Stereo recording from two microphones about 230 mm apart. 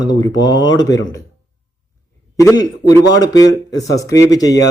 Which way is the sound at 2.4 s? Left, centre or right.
Centre.